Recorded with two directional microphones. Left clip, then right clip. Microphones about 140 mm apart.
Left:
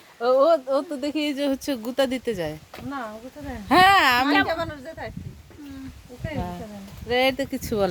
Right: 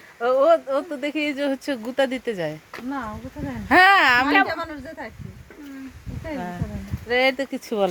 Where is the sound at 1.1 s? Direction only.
45° left (ahead or behind).